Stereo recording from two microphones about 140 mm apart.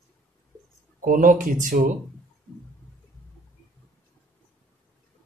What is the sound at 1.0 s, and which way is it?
Speech, 70° right (ahead or behind).